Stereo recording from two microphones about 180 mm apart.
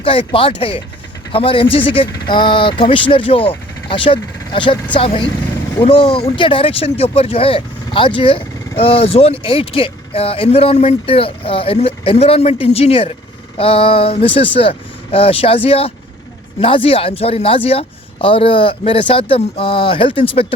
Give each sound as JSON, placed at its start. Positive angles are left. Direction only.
{"t": 0.0, "sound": "speech", "side_deg": 30}